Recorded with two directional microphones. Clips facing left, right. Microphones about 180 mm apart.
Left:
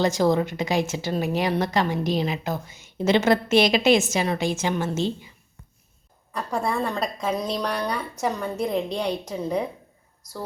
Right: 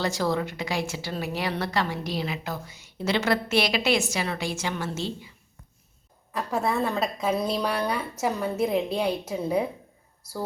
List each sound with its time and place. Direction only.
0.0 s a woman's voice: 20° left (ahead or behind)
6.3 s a woman's voice: 5° right (ahead or behind)